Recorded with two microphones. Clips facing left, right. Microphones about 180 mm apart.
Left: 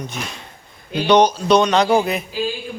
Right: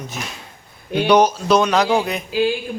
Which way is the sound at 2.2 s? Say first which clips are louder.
Right 5 dB; 70° right (ahead or behind).